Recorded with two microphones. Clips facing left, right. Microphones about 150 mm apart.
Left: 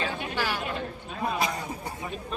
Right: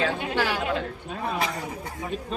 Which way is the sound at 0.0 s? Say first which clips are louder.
Right 5 dB; 90° right.